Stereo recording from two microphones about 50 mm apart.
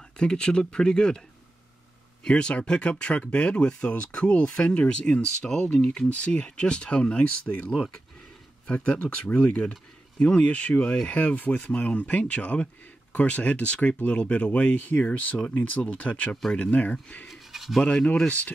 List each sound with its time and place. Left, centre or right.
0.2 s speech: centre
2.2 s speech: left
17.3 s a sound: centre
17.8 s speech: left